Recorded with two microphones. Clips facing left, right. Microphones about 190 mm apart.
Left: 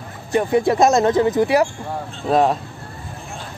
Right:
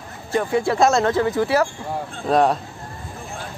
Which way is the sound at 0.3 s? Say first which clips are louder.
Left 3 dB; 20° left (ahead or behind).